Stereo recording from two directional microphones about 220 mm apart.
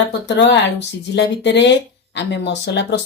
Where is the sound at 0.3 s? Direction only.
50° left (ahead or behind).